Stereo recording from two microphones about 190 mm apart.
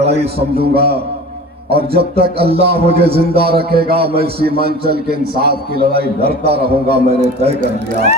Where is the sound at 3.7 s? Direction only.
55° right (ahead or behind).